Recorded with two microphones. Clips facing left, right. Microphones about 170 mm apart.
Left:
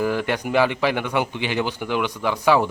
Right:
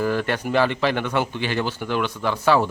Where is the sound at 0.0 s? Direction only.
15° left (ahead or behind).